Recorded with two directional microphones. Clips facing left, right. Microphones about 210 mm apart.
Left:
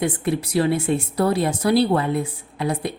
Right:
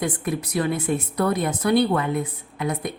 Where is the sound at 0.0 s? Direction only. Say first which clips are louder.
Left 3 dB; 30° left (ahead or behind).